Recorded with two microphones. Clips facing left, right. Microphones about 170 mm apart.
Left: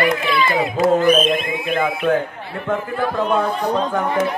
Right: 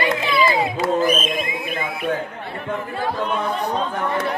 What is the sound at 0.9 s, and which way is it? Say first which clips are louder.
Speech: left 4 dB; 60° left (ahead or behind).